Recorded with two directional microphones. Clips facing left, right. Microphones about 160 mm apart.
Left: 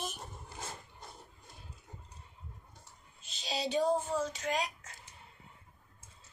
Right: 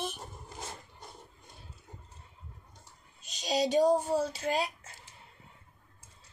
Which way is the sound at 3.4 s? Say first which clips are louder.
Right 6 dB; 40° right (ahead or behind).